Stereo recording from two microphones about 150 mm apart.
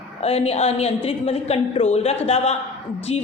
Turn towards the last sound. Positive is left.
turn(degrees=45)  # may be behind; listen again after turning